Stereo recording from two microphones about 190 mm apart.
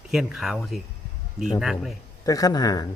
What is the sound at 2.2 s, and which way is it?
Speech, 20° left (ahead or behind).